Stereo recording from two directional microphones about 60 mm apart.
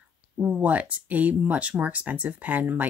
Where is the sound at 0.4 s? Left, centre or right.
Right.